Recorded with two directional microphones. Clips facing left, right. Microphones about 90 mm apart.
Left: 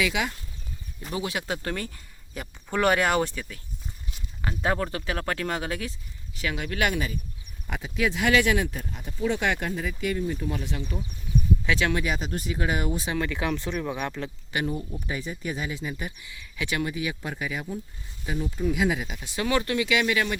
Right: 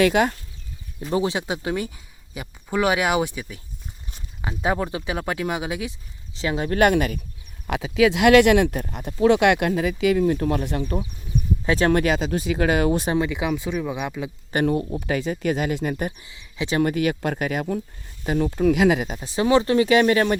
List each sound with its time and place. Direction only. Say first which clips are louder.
0.0 s speech: right 9 dB; 50° right (ahead or behind)
1.1 s speech: right 7 dB; 25° right (ahead or behind)
6.3 s speech: right 7 dB; 25° right (ahead or behind)
6.7 s speech: right 10 dB; 50° right (ahead or behind)
7.7 s speech: right 9 dB; 90° right; by 11.0 s 50° right (ahead or behind)
11.6 s speech: right 10 dB; 40° right (ahead or behind)
12.0 s speech: right 8 dB; 90° right
13.1 s speech: right 5 dB; 15° right (ahead or behind)
14.7 s speech: right 9 dB; 80° right; by 16.1 s 55° right (ahead or behind)
16.2 s speech: right 4 dB; 25° right (ahead or behind)
16.8 s speech: right 9 dB; 65° right (ahead or behind)
19.0 s speech: right 7 dB; 35° right (ahead or behind)